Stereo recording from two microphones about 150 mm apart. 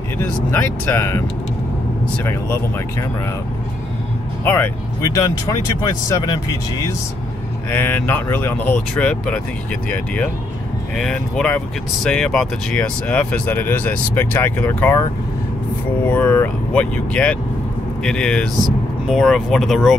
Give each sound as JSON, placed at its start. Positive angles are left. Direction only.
{"t": 0.2, "sound": "speech", "side_deg": 15}
{"t": 2.2, "sound": "speech", "side_deg": 15}
{"t": 4.5, "sound": "speech", "side_deg": 20}
{"t": 7.7, "sound": "speech", "side_deg": 15}
{"t": 16.1, "sound": "speech", "side_deg": 15}